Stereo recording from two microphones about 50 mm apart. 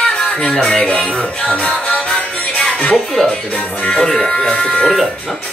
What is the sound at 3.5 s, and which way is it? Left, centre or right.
Music, left.